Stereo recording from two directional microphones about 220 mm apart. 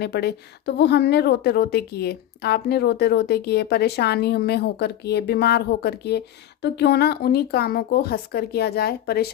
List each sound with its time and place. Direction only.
0.0 s a woman's voice: 45° left (ahead or behind)